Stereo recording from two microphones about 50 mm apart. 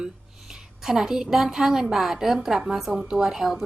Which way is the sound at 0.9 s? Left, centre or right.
Centre.